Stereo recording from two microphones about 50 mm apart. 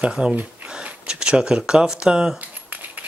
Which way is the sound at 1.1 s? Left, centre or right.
Centre.